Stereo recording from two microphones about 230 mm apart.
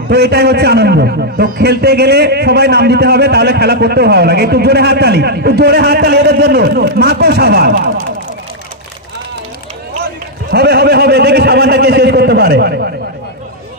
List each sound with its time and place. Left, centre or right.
0.1 s a man's voice: right
10.5 s a man's voice: right